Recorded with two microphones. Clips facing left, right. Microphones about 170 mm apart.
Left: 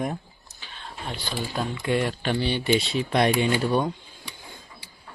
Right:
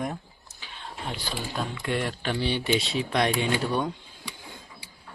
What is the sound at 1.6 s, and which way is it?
Speech, 5° left (ahead or behind).